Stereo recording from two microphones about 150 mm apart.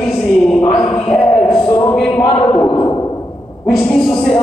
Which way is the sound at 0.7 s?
40° left (ahead or behind).